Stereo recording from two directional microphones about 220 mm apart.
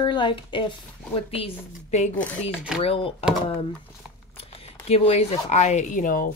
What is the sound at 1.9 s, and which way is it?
Speech, 30° left (ahead or behind).